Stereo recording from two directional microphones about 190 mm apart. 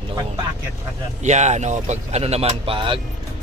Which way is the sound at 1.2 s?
40° right (ahead or behind).